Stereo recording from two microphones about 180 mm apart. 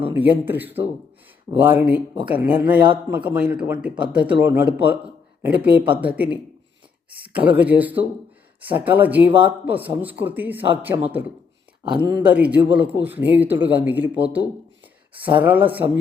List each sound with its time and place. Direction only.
0.0 s speech: 10° right (ahead or behind)
11.8 s speech: 25° right (ahead or behind)
12.3 s speech: 10° right (ahead or behind)